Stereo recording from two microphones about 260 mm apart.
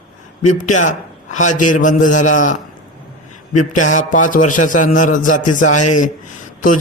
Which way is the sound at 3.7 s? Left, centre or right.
Left.